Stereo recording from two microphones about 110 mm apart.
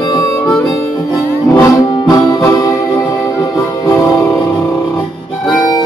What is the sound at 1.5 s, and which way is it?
Music, 30° left (ahead or behind).